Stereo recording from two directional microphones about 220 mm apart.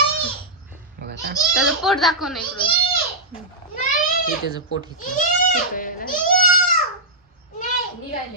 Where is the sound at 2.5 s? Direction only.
25° left (ahead or behind).